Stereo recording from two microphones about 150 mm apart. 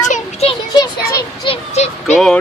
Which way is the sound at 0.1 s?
45° left (ahead or behind).